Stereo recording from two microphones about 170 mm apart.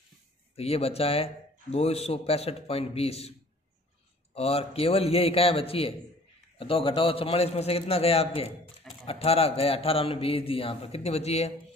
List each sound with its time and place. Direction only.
0.6 s a man's voice: 35° left (ahead or behind)